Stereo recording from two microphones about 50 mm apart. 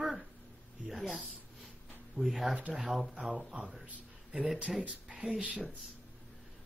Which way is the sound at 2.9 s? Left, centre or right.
Centre.